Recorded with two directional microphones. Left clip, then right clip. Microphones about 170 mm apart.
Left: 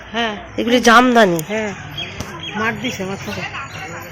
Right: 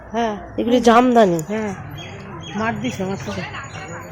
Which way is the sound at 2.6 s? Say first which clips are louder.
Left 2 dB; 70° right (ahead or behind).